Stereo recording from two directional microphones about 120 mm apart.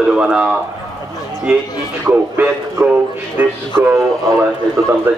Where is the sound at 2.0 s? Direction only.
20° right (ahead or behind).